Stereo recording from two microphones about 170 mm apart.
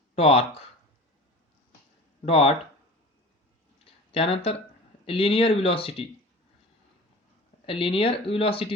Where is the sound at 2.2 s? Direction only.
35° left (ahead or behind).